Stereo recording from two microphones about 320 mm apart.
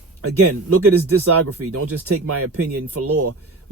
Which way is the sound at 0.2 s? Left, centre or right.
Right.